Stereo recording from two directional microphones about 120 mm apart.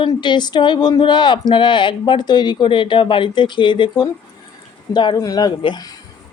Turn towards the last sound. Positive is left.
turn(degrees=35)  # may be behind; listen again after turning